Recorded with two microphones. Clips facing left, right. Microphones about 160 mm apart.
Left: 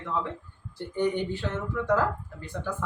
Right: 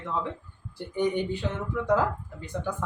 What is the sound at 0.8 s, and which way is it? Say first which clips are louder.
Speech: even; 15° right (ahead or behind).